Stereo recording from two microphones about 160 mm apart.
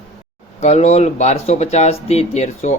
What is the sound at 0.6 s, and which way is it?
Speech, 40° left (ahead or behind).